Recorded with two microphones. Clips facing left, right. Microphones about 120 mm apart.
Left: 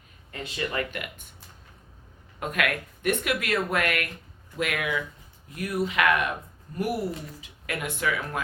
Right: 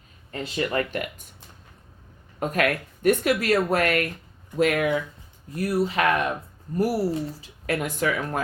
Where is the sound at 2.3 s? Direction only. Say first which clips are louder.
Right 4 dB; 35° right (ahead or behind).